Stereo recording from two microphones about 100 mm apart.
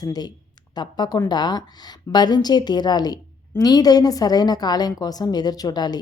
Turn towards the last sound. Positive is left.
turn(degrees=45)  # may be behind; listen again after turning